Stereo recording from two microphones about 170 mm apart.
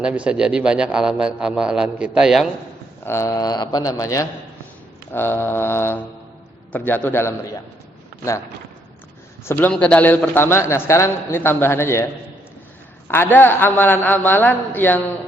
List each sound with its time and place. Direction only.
0.0 s speech: 5° right (ahead or behind)
3.0 s a man's voice: 15° left (ahead or behind)
9.4 s a man's voice: 10° left (ahead or behind)
13.1 s a man's voice: 15° left (ahead or behind)